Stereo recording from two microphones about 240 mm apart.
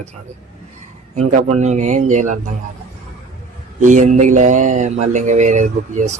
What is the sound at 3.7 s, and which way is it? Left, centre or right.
Mantra, right.